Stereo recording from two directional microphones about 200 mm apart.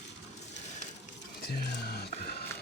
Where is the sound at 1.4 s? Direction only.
55° left (ahead or behind).